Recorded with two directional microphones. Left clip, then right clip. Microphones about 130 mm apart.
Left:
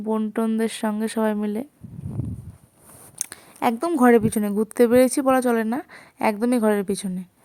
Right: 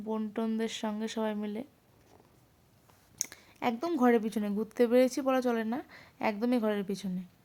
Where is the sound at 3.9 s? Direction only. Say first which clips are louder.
Left 10 dB; 40° left (ahead or behind).